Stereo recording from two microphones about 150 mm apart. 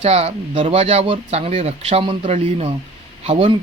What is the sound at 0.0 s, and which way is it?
Speech, 40° right (ahead or behind).